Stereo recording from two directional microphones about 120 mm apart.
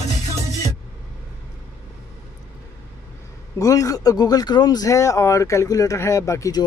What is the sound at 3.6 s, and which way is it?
Speech, 30° left (ahead or behind).